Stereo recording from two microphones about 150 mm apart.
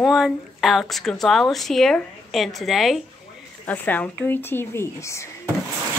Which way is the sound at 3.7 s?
10° left (ahead or behind).